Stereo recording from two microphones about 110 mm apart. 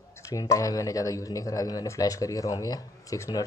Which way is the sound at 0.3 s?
30° left (ahead or behind).